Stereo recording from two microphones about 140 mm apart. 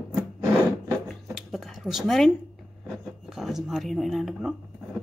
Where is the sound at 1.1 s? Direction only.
Centre (ahead or behind).